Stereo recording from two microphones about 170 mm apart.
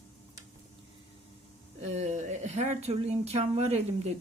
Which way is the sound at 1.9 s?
45° right (ahead or behind).